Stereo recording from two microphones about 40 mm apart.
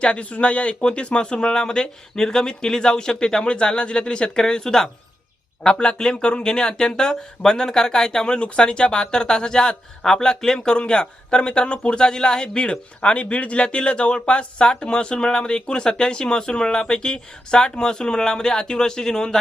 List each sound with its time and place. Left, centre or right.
0.0 s speech: left